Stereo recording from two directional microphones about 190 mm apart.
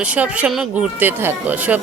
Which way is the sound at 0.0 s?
5° right (ahead or behind).